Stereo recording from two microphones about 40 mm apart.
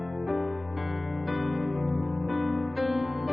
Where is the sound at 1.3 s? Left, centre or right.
Centre.